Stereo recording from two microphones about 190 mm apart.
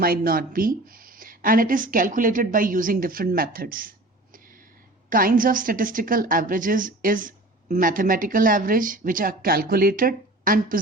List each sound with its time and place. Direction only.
0.0 s a woman's voice: 50° right (ahead or behind)
5.0 s a woman's voice: 45° right (ahead or behind)